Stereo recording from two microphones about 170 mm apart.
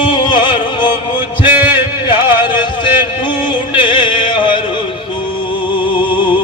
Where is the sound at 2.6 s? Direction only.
25° left (ahead or behind).